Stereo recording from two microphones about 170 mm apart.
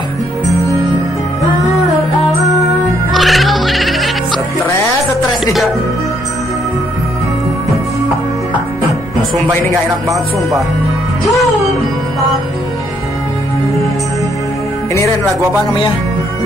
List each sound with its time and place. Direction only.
3.1 s music: centre (ahead or behind)
9.7 s speech: 20° right (ahead or behind)